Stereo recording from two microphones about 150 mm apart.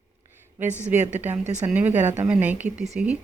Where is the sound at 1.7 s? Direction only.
10° right (ahead or behind).